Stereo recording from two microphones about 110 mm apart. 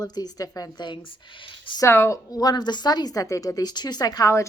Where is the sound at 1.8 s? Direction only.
25° left (ahead or behind).